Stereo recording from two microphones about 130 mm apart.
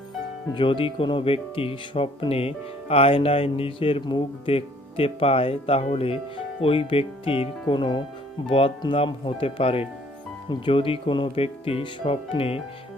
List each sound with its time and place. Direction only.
0.5 s speech: 40° left (ahead or behind)